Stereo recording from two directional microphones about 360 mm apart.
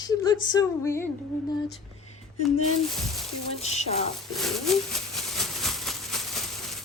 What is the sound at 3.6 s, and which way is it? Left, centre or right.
Speech, centre.